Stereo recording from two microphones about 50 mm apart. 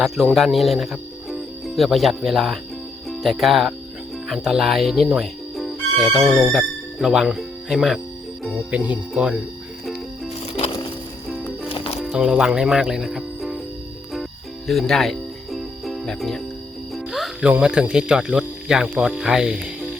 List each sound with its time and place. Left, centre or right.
0.3 s speech: centre
5.2 s music: centre
6.4 s speech: centre
8.7 s speech: right
12.1 s speech: centre
13.1 s music: centre
14.7 s music: centre
17.6 s speech: right